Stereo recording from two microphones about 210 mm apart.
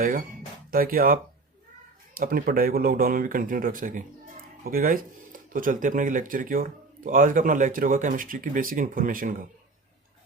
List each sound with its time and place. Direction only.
0.0 s speech: 40° right (ahead or behind)